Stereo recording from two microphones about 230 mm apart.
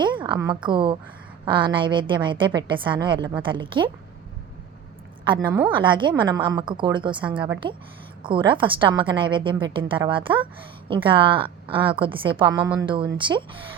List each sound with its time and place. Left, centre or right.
0.0 s a woman's voice: right
5.2 s a woman's voice: right